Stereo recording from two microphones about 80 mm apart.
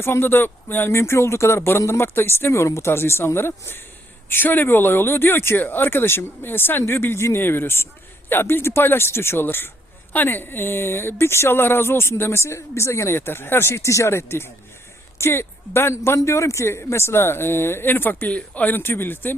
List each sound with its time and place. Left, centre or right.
0.0 s speech: left